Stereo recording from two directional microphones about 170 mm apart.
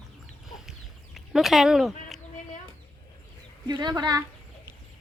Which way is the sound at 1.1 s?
Centre (ahead or behind).